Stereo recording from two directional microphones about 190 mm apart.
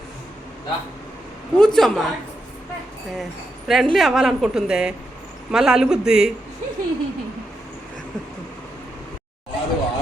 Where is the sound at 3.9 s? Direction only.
Centre (ahead or behind).